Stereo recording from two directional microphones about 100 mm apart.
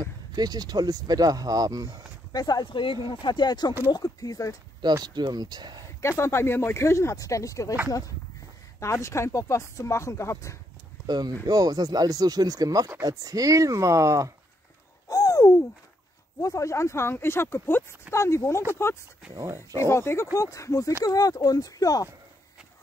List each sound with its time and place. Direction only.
0.0 s speech: 40° right (ahead or behind)
2.3 s speech: 40° left (ahead or behind)
4.8 s speech: 45° right (ahead or behind)
5.9 s speech: 25° left (ahead or behind)
8.7 s speech: 30° left (ahead or behind)
11.1 s speech: 45° right (ahead or behind)
15.0 s a sound: 30° left (ahead or behind)
16.3 s speech: 35° left (ahead or behind)
19.3 s speech: 25° right (ahead or behind)
19.8 s speech: 25° left (ahead or behind)